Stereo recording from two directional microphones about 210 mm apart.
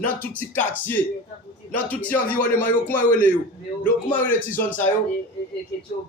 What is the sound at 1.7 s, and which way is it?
A man's voice, 5° left (ahead or behind).